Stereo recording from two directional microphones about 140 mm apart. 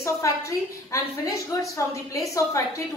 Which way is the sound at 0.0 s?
20° left (ahead or behind).